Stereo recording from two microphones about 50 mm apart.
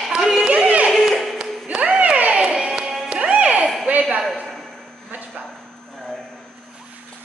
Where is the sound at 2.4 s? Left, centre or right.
Centre.